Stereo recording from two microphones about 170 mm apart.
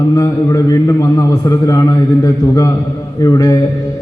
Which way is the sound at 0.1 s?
20° left (ahead or behind).